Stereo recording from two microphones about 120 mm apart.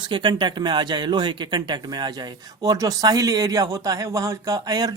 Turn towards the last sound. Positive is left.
turn(degrees=-30)  # may be behind; listen again after turning